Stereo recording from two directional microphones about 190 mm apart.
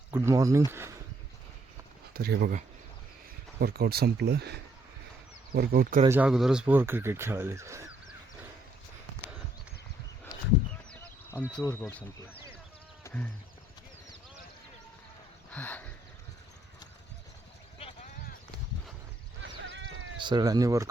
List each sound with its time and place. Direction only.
0.1 s speech: 15° right (ahead or behind)
2.1 s speech: 55° right (ahead or behind)
3.6 s speech: 55° right (ahead or behind)
6.1 s speech: 5° right (ahead or behind)
11.4 s speech: 10° left (ahead or behind)
15.4 s a sound: 10° left (ahead or behind)
19.4 s a sound: 75° right (ahead or behind)
20.1 s speech: 25° right (ahead or behind)